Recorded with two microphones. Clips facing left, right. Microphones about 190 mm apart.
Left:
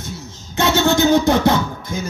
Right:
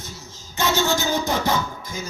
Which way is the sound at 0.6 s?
60° left (ahead or behind).